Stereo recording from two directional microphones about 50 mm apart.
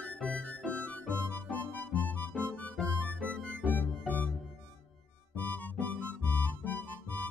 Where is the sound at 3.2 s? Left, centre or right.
Left.